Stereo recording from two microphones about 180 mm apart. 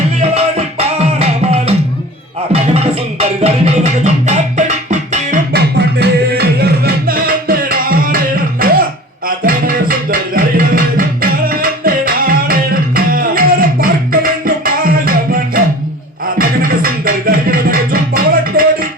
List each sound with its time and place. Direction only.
0.2 s music: 35° right (ahead or behind)
5.5 s music: 65° right (ahead or behind)